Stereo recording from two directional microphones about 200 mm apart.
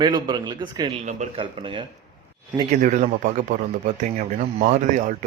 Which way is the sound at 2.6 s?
35° right (ahead or behind).